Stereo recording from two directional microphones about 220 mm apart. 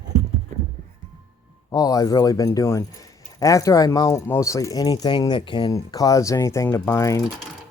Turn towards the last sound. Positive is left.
turn(degrees=15)  # may be behind; listen again after turning